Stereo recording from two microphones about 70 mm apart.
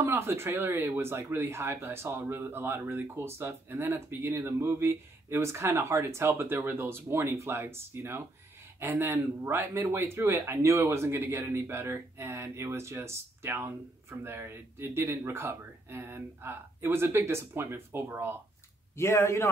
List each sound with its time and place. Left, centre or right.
0.1 s speech: right
18.9 s speech: left